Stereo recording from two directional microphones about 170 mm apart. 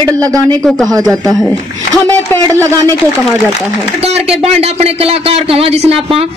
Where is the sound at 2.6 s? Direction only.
20° right (ahead or behind).